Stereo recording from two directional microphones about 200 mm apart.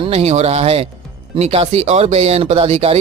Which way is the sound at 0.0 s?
30° right (ahead or behind).